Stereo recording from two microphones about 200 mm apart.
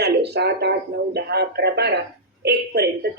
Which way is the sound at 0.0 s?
55° right (ahead or behind).